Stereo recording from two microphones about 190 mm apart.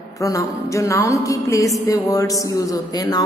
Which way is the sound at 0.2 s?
15° left (ahead or behind).